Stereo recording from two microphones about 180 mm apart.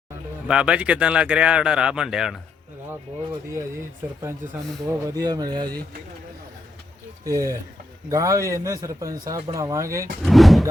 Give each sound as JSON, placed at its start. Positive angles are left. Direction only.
{"t": 0.4, "sound": "speech", "side_deg": -5}
{"t": 4.0, "sound": "a man's voice", "side_deg": -15}
{"t": 7.3, "sound": "a man's voice", "side_deg": -15}
{"t": 10.2, "sound": "speech", "side_deg": 0}